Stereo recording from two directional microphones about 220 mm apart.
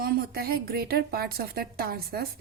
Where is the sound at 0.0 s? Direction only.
45° right (ahead or behind).